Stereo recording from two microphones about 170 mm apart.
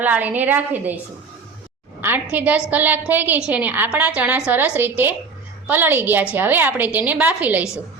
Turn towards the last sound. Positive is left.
turn(degrees=-10)  # may be behind; listen again after turning